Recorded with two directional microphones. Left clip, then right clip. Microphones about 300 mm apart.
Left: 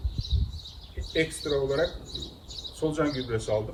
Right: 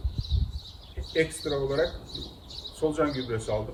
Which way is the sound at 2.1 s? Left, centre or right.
Right.